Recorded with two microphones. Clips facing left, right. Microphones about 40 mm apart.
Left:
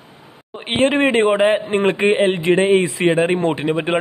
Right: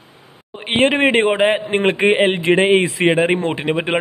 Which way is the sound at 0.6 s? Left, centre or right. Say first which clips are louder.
Right 1 dB; right.